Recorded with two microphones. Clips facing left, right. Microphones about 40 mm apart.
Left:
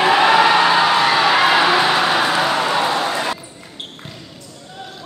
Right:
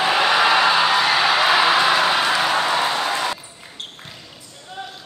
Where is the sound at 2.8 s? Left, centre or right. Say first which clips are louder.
Left 3 dB; left.